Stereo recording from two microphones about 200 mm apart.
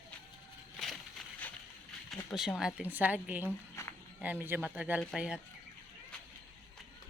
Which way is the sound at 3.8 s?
15° left (ahead or behind).